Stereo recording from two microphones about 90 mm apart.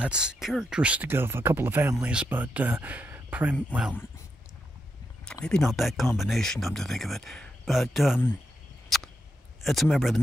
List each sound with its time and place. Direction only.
0.0 s speech: 10° right (ahead or behind)
1.1 s speech: 25° right (ahead or behind)
2.0 s speech: 10° right (ahead or behind)
5.2 s speech: 10° left (ahead or behind)
9.6 s speech: centre (ahead or behind)